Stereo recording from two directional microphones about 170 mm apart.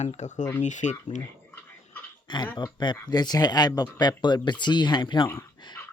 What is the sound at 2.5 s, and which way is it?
Speech, 25° left (ahead or behind).